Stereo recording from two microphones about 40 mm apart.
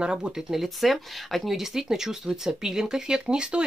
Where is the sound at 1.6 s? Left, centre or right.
Centre.